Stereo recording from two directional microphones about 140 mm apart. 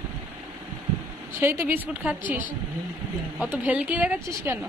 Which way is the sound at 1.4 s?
15° right (ahead or behind).